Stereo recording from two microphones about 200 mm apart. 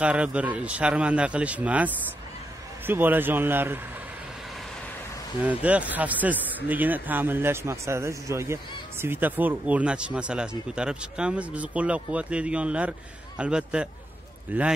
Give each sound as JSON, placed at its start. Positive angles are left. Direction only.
{"t": 0.0, "sound": "speech", "side_deg": -5}
{"t": 5.4, "sound": "a man's voice", "side_deg": -5}